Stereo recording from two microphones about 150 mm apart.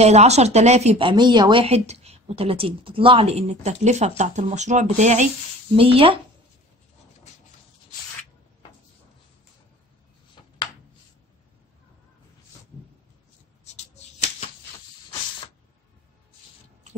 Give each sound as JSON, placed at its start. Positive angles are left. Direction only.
{"t": 0.0, "sound": "speech", "side_deg": -45}
{"t": 5.8, "sound": "speech", "side_deg": -40}